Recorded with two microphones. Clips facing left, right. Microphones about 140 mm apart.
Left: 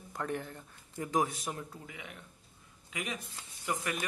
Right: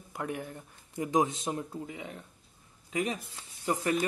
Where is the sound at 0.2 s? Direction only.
10° right (ahead or behind).